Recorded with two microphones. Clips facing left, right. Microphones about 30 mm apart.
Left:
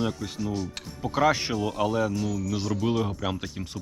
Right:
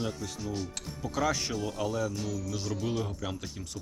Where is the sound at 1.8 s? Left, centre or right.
Left.